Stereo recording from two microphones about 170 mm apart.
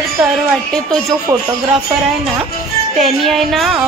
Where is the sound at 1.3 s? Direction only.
20° right (ahead or behind).